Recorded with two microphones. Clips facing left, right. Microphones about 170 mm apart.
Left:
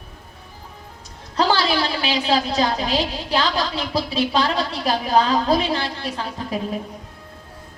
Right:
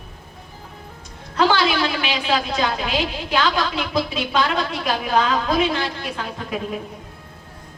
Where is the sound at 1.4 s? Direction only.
35° left (ahead or behind).